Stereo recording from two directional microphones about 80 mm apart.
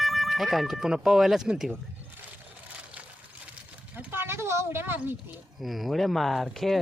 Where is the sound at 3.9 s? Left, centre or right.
Right.